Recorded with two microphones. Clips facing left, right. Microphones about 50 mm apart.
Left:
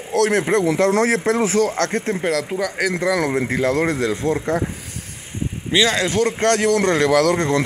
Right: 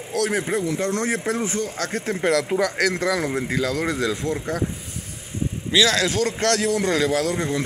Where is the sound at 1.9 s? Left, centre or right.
Left.